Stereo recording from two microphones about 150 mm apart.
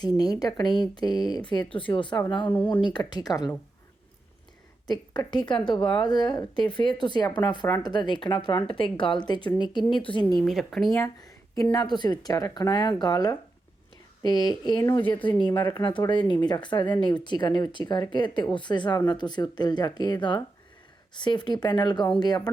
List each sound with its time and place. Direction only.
0.2 s speech: 25° left (ahead or behind)
4.9 s speech: 30° left (ahead or behind)
10.4 s speech: centre (ahead or behind)
10.9 s speech: 20° left (ahead or behind)